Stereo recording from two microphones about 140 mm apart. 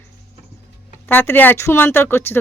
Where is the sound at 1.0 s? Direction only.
15° left (ahead or behind).